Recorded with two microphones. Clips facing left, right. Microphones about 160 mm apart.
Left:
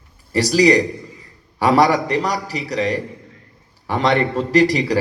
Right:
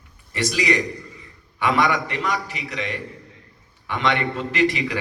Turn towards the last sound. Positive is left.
turn(degrees=35)  # may be behind; listen again after turning